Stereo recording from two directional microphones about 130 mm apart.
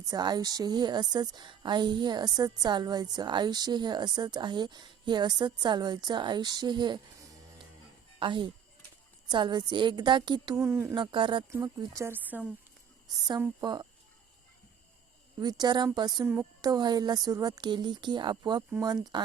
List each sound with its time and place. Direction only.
0.0 s a woman's voice: 30° right (ahead or behind)
10.6 s speech: 15° right (ahead or behind)
10.9 s a woman's voice: 40° right (ahead or behind)
11.5 s speech: 25° right (ahead or behind)
13.6 s a woman's voice: 35° right (ahead or behind)
15.4 s a woman's voice: 35° right (ahead or behind)
16.2 s speech: 15° right (ahead or behind)
16.6 s a woman's voice: 30° right (ahead or behind)